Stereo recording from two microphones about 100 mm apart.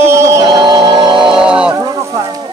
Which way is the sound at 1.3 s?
10° right (ahead or behind).